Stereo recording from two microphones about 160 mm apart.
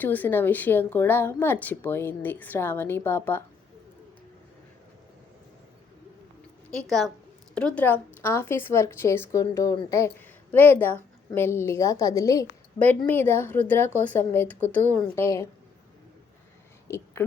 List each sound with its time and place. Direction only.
0.0 s a woman's voice: 10° left (ahead or behind)
6.7 s a woman's voice: centre (ahead or behind); by 12.5 s 20° left (ahead or behind)
12.8 s a woman's voice: 10° left (ahead or behind)
16.9 s speech: 15° left (ahead or behind)